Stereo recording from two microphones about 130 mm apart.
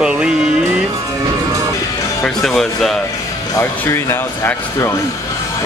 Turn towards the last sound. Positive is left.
turn(degrees=20)  # may be behind; listen again after turning